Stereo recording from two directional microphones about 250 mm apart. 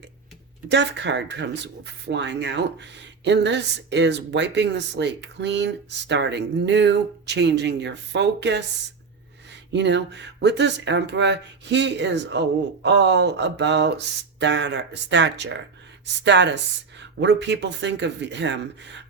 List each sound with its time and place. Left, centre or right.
0.7 s speech: right